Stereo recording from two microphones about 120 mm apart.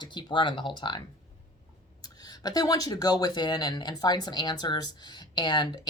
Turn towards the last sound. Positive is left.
turn(degrees=40)  # may be behind; listen again after turning